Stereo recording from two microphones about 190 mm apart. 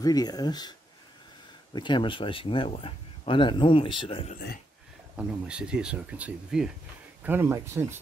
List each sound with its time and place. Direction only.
0.0 s speech: 20° left (ahead or behind)
1.8 s speech: 25° left (ahead or behind)
5.1 s speech: 5° right (ahead or behind)